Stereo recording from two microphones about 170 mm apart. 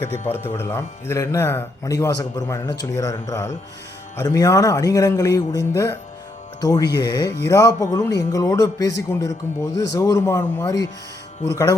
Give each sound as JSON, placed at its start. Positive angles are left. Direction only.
{"t": 0.0, "sound": "a man's voice", "side_deg": 10}